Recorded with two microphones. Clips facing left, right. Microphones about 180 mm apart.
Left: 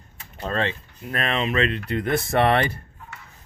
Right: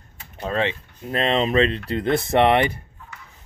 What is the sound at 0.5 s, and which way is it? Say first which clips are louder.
Speech: right 2 dB; 15° right (ahead or behind).